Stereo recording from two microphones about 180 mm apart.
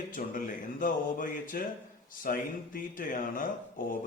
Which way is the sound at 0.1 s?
50° left (ahead or behind).